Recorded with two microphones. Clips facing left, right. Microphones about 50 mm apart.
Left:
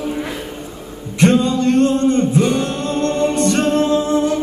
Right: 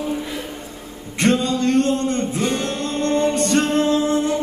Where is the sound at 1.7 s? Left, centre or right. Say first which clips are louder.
Left 4 dB; left.